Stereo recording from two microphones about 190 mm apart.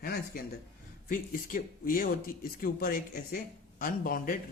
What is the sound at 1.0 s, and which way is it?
Speech, 45° left (ahead or behind).